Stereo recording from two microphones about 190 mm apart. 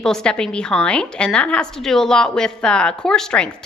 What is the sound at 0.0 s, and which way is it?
A woman's voice, 5° left (ahead or behind).